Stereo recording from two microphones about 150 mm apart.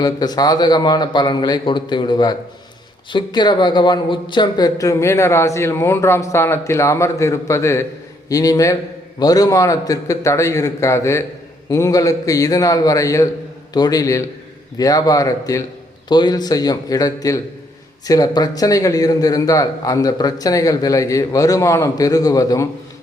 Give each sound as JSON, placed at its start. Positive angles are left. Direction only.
{"t": 0.0, "sound": "speech", "side_deg": 25}